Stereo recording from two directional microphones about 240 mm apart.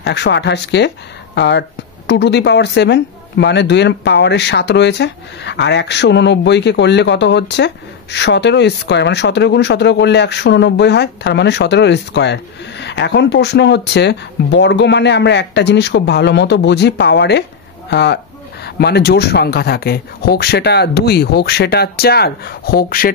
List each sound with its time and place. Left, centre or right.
0.0 s speech: left